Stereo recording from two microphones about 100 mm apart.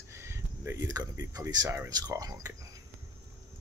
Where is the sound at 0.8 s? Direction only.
40° right (ahead or behind).